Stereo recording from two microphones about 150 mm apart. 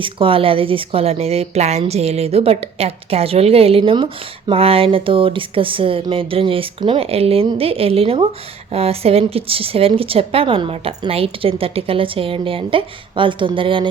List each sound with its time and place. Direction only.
0.0 s speech: 35° right (ahead or behind)